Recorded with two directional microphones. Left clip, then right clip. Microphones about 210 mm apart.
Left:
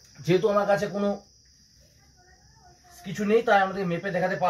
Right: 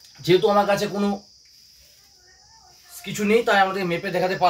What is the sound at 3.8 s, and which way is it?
Speech, 20° right (ahead or behind).